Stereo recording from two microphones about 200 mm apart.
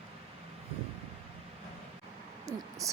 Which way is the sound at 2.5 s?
15° right (ahead or behind).